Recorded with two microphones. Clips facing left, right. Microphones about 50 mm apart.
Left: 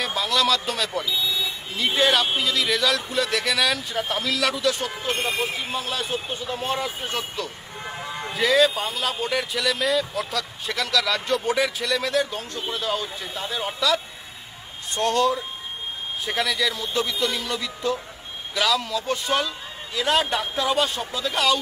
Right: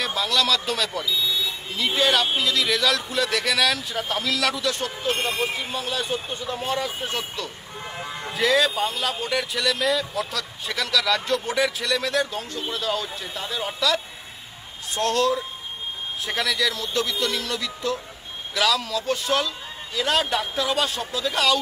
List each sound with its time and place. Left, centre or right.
0.0 s a man's voice: centre
6.6 s speech: centre
7.1 s speech: centre